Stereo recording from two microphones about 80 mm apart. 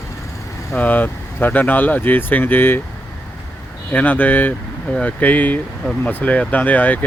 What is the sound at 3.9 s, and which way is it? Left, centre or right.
Speech, left.